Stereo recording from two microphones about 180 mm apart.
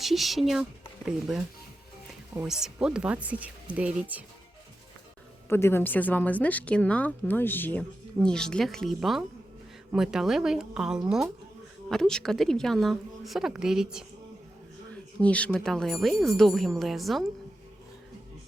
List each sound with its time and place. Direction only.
0.0 s a woman's voice: centre (ahead or behind)
2.4 s speech: 5° right (ahead or behind)
5.5 s a woman's voice: 15° left (ahead or behind); by 14.0 s 5° right (ahead or behind)
15.2 s a woman's voice: 5° left (ahead or behind)